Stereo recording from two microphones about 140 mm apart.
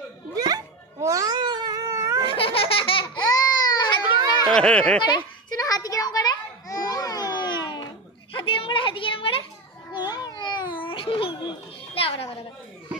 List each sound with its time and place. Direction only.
1.0 s cat: 25° right (ahead or behind)
2.2 s laughter: 40° left (ahead or behind)
4.5 s speech: 5° left (ahead or behind)
5.0 s a sound: 30° left (ahead or behind)
9.9 s baby cry: 30° left (ahead or behind)